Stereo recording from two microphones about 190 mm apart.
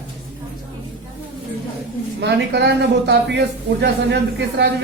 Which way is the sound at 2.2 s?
65° right (ahead or behind).